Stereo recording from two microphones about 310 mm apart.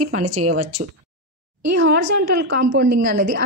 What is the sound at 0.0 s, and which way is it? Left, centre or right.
Speech, right.